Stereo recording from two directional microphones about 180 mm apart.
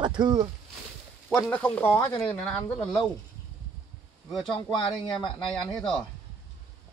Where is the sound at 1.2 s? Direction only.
5° left (ahead or behind).